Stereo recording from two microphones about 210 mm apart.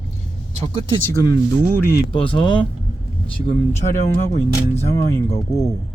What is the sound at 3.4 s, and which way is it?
Speech, 30° left (ahead or behind).